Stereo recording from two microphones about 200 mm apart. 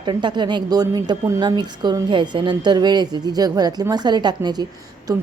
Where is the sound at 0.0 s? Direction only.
25° right (ahead or behind).